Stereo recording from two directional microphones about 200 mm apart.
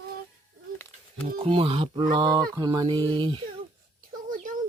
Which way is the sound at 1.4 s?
25° right (ahead or behind).